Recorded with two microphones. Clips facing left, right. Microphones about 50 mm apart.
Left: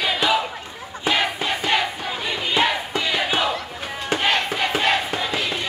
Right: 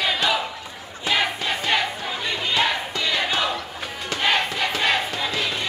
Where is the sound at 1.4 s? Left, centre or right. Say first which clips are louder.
Left 1 dB; centre.